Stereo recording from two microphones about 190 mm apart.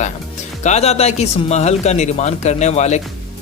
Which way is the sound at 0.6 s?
35° left (ahead or behind).